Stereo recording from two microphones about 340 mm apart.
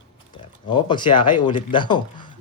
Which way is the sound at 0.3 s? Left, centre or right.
Centre.